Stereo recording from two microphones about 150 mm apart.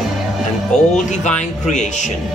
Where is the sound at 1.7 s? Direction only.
50° left (ahead or behind).